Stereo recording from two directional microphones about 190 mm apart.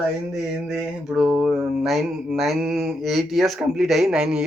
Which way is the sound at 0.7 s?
Centre (ahead or behind).